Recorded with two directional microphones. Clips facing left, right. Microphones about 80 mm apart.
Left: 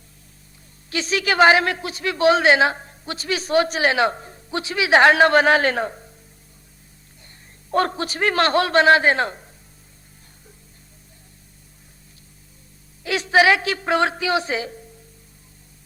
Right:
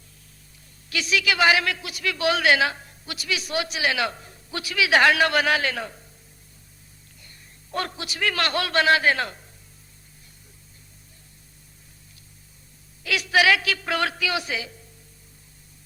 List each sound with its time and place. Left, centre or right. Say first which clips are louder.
0.9 s a man's voice: left 2 dB; left
7.2 s a man's voice: left 2 dB; left
13.0 s a man's voice: left 4 dB; left